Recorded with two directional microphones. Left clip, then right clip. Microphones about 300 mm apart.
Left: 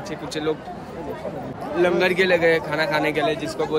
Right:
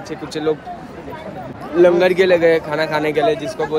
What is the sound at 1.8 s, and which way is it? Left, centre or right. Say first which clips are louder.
A man's voice: right 7 dB; centre.